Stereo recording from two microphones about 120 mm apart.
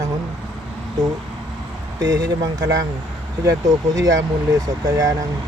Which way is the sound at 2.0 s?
30° right (ahead or behind).